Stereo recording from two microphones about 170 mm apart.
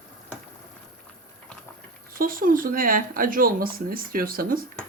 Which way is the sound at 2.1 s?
55° right (ahead or behind).